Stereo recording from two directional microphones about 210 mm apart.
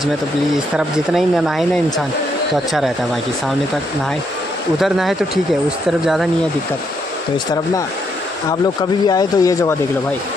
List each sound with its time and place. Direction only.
0.7 s speech: centre (ahead or behind)
4.7 s speech: centre (ahead or behind)
9.0 s speech: 15° left (ahead or behind)